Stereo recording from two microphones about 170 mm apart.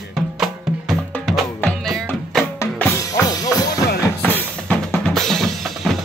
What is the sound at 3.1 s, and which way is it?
Drum, 20° left (ahead or behind).